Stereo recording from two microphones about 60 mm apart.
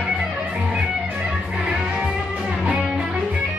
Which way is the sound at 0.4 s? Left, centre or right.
Centre.